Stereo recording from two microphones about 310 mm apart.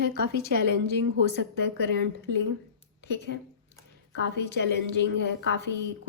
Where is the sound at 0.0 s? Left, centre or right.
Right.